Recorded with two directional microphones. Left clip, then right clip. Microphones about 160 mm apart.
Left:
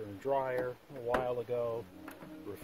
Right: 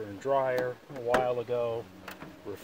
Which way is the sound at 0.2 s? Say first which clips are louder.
Right 6 dB; 5° left (ahead or behind).